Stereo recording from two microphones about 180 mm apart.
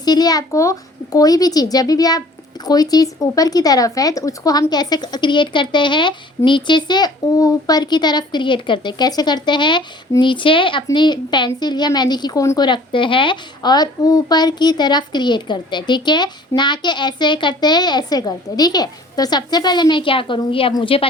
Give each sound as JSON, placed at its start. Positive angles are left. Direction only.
{"t": 0.0, "sound": "a woman's voice", "side_deg": 20}